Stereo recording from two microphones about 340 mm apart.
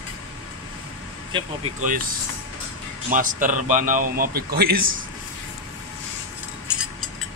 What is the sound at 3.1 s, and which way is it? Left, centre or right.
Mantra, right.